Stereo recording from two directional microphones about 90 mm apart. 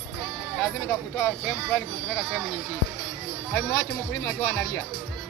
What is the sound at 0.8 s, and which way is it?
Speech, 30° left (ahead or behind).